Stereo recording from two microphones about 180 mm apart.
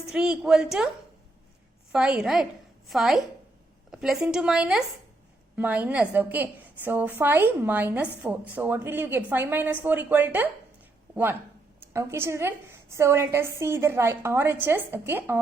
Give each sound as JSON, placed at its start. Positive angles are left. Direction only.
{"t": 0.1, "sound": "a woman's voice", "side_deg": -5}
{"t": 1.9, "sound": "a woman's voice", "side_deg": -5}